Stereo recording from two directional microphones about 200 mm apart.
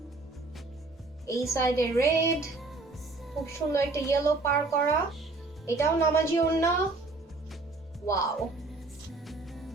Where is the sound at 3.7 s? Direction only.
15° left (ahead or behind).